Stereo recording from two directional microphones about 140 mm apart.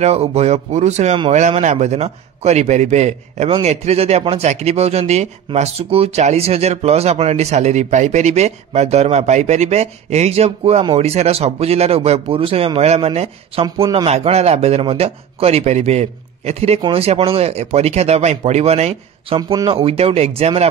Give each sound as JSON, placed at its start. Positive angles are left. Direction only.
{"t": 0.0, "sound": "speech", "side_deg": -45}
{"t": 19.5, "sound": "speech", "side_deg": -30}
{"t": 19.8, "sound": "speech", "side_deg": -45}